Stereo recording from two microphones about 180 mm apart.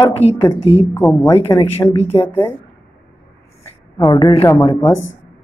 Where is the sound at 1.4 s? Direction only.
25° left (ahead or behind).